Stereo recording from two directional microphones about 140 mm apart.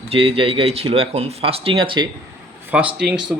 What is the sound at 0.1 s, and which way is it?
Speech, 40° right (ahead or behind).